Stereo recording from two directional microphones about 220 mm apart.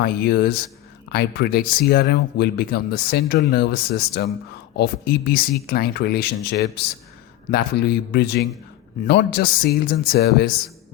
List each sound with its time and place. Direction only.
0.0 s speech: 45° left (ahead or behind)